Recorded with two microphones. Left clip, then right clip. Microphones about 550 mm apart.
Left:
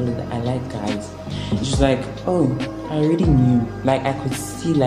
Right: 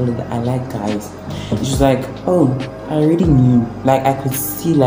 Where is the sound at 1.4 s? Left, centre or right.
Left.